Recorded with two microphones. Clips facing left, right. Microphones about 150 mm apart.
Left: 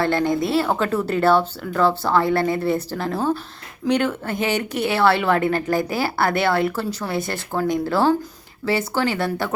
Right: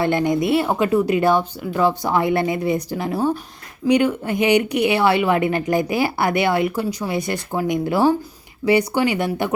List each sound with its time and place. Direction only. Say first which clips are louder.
0.0 s speech: right 1 dB; 15° right (ahead or behind)